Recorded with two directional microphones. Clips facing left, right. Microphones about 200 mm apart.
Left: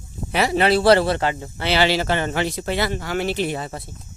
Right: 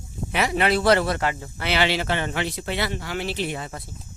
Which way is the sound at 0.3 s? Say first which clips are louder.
Left 4 dB; 35° left (ahead or behind).